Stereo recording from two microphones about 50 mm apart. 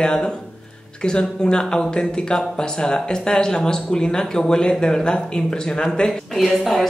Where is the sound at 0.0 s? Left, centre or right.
Centre.